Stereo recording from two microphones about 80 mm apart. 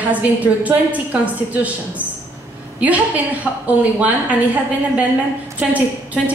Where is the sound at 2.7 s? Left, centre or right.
Centre.